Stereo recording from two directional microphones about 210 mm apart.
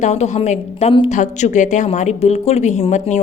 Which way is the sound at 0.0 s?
35° left (ahead or behind).